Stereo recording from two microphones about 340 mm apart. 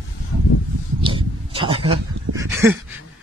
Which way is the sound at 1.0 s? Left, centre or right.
Centre.